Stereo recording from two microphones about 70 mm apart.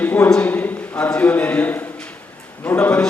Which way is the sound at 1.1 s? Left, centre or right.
Left.